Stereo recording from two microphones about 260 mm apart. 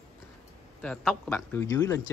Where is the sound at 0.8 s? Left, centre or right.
Centre.